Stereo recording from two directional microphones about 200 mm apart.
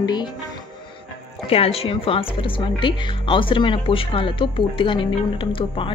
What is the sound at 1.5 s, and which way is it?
A woman's voice, 30° left (ahead or behind).